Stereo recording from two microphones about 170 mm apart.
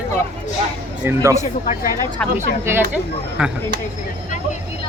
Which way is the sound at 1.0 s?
15° right (ahead or behind).